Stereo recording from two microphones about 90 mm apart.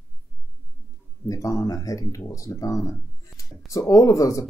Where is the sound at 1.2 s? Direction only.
35° left (ahead or behind).